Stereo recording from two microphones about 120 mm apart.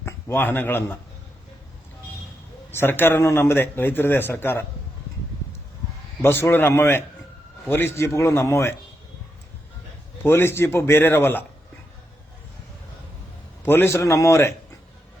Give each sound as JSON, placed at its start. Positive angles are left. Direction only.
{"t": 0.0, "sound": "a man's voice", "side_deg": 20}
{"t": 2.7, "sound": "a man's voice", "side_deg": 15}
{"t": 6.2, "sound": "a man's voice", "side_deg": 20}
{"t": 10.2, "sound": "a man's voice", "side_deg": 20}
{"t": 13.7, "sound": "a man's voice", "side_deg": 20}